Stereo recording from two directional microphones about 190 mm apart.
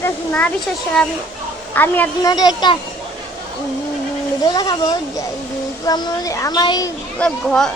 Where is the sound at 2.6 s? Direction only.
25° left (ahead or behind).